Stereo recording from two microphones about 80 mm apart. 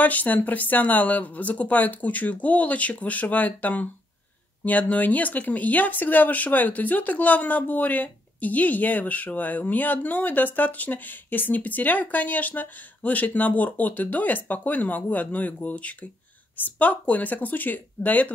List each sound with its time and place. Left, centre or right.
0.0 s speech: left